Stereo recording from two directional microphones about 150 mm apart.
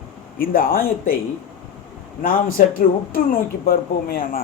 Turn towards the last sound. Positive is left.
turn(degrees=75)  # may be behind; listen again after turning